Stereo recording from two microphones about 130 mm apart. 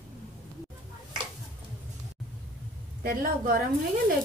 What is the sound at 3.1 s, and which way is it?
Speech, 90° right.